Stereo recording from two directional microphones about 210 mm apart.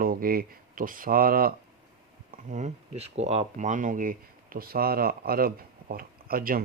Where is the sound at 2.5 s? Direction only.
35° right (ahead or behind).